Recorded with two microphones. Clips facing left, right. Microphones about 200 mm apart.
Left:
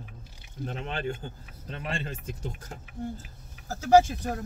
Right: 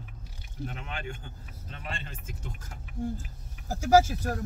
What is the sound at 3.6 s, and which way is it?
Speech, 15° right (ahead or behind).